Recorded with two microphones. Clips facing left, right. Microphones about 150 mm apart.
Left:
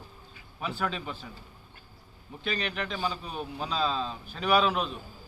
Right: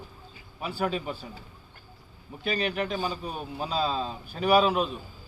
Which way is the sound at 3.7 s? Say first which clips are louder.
Right 2 dB; 35° right (ahead or behind).